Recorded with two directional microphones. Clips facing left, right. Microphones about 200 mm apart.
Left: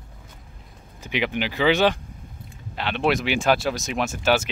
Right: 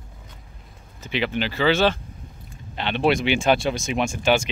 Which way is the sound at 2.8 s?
Centre (ahead or behind).